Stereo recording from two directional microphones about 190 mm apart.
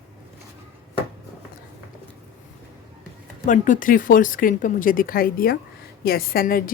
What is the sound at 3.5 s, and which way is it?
A woman's voice, 40° left (ahead or behind).